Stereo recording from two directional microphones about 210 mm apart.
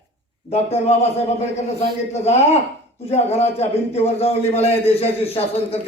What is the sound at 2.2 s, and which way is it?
A man's voice, 30° left (ahead or behind).